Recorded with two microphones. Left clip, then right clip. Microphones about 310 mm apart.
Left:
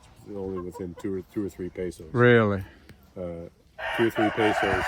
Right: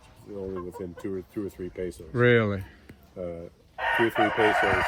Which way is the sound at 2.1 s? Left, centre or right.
Centre.